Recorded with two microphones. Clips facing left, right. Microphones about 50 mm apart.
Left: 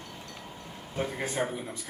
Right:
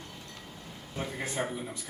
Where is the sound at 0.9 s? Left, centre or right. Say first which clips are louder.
Left 3 dB; left.